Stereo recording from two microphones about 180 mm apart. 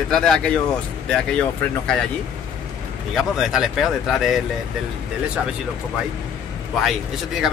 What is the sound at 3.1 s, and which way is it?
Speech, centre (ahead or behind).